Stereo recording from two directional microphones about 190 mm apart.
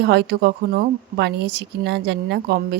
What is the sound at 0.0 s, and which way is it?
Speech, 60° right (ahead or behind).